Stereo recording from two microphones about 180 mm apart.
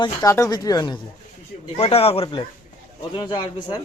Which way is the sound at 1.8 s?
35° left (ahead or behind).